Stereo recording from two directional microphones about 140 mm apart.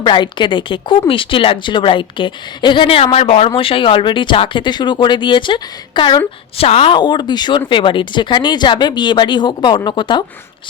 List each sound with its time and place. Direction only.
0.0 s speech: 35° left (ahead or behind)